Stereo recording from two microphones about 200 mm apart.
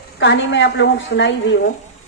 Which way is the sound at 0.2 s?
65° left (ahead or behind).